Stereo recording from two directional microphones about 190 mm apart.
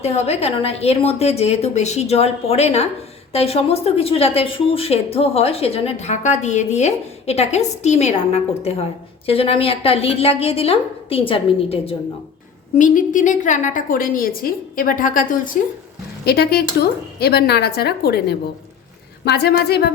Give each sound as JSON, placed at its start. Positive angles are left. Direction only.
{"t": 0.0, "sound": "speech", "side_deg": 35}
{"t": 12.7, "sound": "a woman's voice", "side_deg": 45}
{"t": 16.2, "sound": "speech", "side_deg": 55}